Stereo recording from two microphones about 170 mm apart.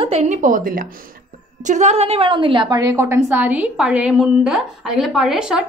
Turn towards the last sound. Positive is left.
turn(degrees=-5)  # may be behind; listen again after turning